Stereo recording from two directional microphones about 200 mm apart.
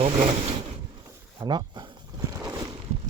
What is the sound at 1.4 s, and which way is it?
Speech, 20° right (ahead or behind).